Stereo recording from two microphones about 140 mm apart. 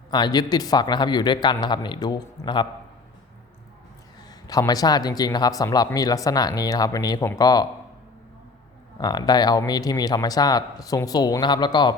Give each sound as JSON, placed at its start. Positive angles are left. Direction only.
{"t": 0.1, "sound": "speech", "side_deg": 30}
{"t": 4.3, "sound": "speech", "side_deg": 25}
{"t": 9.0, "sound": "speech", "side_deg": 30}